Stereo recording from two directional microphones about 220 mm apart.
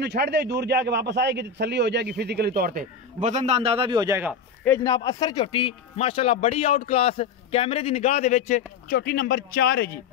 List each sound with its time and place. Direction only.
0.0 s a man's voice: 50° right (ahead or behind); by 4.4 s 10° right (ahead or behind)
4.6 s speech: 15° left (ahead or behind); by 9.8 s 45° left (ahead or behind)